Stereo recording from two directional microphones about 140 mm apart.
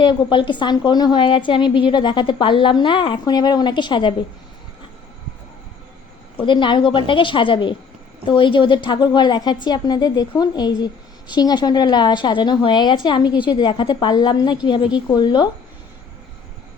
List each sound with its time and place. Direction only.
0.0 s a woman's voice: 35° left (ahead or behind)
6.4 s a woman's voice: 35° left (ahead or behind)